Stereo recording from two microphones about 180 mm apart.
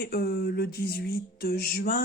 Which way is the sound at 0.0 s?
55° left (ahead or behind).